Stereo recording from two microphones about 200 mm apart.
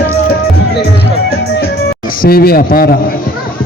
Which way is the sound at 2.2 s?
50° left (ahead or behind).